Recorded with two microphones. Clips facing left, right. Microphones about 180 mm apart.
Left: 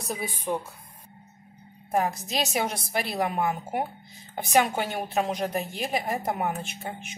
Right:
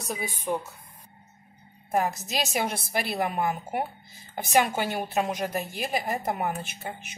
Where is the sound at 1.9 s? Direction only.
Centre (ahead or behind).